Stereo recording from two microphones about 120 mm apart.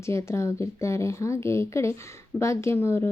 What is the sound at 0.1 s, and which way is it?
A woman's voice, 25° left (ahead or behind).